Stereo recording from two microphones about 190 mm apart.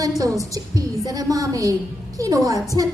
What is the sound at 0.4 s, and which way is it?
A woman's voice, 20° right (ahead or behind).